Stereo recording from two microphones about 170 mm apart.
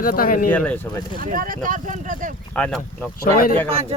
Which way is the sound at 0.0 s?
55° left (ahead or behind).